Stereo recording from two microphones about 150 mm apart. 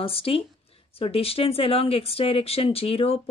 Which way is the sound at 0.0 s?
40° left (ahead or behind).